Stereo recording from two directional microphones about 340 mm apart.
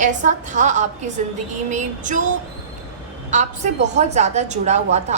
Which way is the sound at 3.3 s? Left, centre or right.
Right.